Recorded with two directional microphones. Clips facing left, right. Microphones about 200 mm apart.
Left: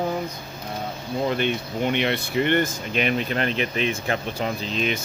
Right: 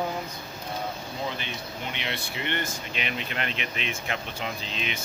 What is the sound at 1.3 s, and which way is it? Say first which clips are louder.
Speech: left 12 dB; 60° left (ahead or behind).